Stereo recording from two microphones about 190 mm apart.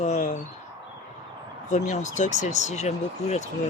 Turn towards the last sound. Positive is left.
turn(degrees=35)  # may be behind; listen again after turning